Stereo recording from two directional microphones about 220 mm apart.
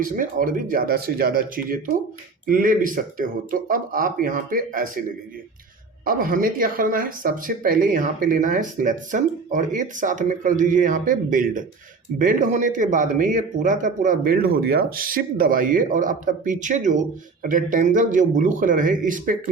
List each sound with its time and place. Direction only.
0.0 s speech: 35° right (ahead or behind)